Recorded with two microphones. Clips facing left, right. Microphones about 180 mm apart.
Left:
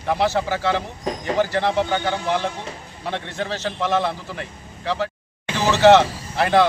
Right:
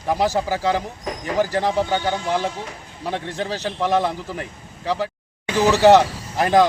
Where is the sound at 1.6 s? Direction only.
10° right (ahead or behind).